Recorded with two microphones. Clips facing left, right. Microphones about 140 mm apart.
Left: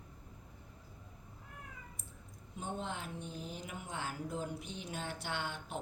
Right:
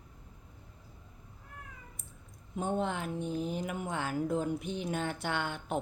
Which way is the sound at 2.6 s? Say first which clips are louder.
Right 9 dB; 60° right (ahead or behind).